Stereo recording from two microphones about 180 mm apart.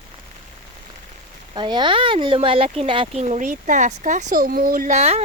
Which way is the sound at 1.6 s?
25° right (ahead or behind).